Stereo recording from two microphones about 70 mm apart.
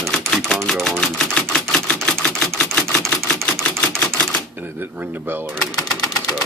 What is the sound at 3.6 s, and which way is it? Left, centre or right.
Camera, centre.